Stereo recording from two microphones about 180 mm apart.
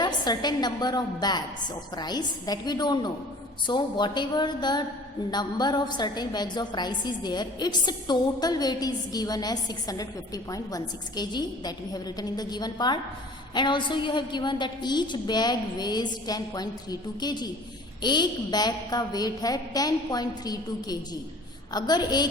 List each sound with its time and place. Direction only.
0.0 s a woman's voice: 20° left (ahead or behind)